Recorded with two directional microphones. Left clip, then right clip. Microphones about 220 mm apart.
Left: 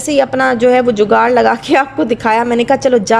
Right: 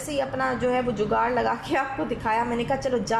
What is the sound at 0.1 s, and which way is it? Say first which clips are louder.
Speech: left 14 dB; 45° left (ahead or behind).